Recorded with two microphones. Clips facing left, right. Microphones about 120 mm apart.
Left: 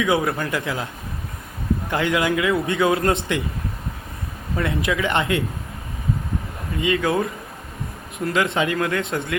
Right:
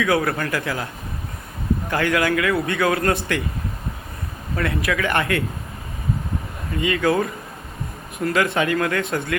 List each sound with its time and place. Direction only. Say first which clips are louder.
0.0 s speech: even; 15° left (ahead or behind)
1.9 s a man's voice: right 1 dB; 20° left (ahead or behind)
4.5 s a man's voice: even; 20° left (ahead or behind)
6.8 s a man's voice: right 1 dB; 15° left (ahead or behind)